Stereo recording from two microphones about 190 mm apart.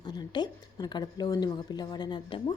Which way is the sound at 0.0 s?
20° left (ahead or behind).